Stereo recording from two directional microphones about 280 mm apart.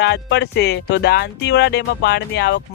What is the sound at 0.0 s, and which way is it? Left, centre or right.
Speech, left.